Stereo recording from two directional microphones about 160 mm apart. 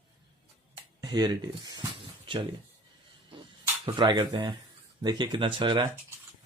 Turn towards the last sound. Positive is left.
turn(degrees=-30)  # may be behind; listen again after turning